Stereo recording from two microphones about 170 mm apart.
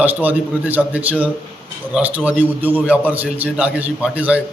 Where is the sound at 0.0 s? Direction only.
10° right (ahead or behind).